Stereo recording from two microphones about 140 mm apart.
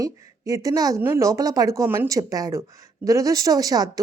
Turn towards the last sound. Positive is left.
turn(degrees=-25)  # may be behind; listen again after turning